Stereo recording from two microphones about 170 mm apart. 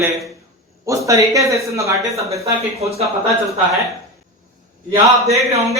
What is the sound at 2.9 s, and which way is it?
Speech, 40° right (ahead or behind).